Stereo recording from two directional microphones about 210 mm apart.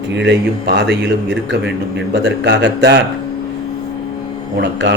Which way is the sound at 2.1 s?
55° right (ahead or behind).